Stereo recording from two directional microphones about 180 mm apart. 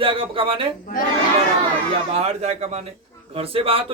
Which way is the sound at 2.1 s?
35° right (ahead or behind).